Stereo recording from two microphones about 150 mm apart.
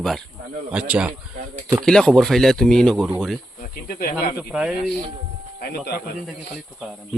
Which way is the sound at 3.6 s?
75° left (ahead or behind).